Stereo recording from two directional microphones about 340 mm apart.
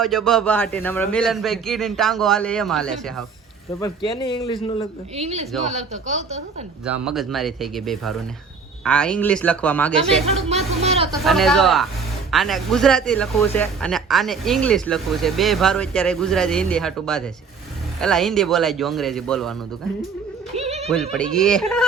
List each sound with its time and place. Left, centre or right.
0.0 s a man's voice: centre
5.1 s a woman's voice: centre
6.8 s speech: centre
10.5 s speech: centre
11.2 s speech: centre
20.6 s a sound: centre
20.8 s speech: centre